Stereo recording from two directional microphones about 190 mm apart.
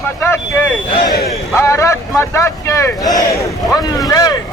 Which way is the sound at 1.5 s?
15° left (ahead or behind).